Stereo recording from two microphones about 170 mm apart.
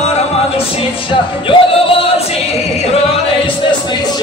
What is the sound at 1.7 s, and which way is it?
Singing, 30° left (ahead or behind).